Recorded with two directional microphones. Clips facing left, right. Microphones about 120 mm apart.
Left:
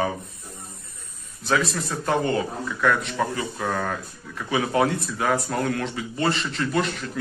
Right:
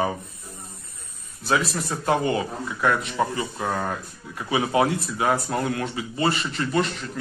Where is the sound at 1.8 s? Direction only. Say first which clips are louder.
Right 3 dB; 15° right (ahead or behind).